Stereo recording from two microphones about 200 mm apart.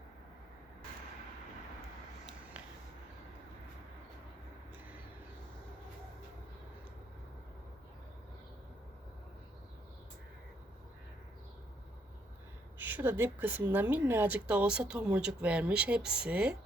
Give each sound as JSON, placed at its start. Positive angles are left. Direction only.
{"t": 12.8, "sound": "a woman's voice", "side_deg": -10}